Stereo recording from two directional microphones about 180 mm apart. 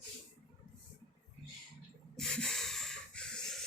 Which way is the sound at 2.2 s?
5° left (ahead or behind).